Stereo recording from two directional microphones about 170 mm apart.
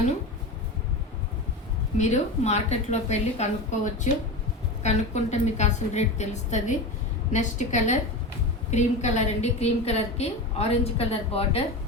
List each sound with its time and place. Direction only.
2.0 s a woman's voice: 40° left (ahead or behind)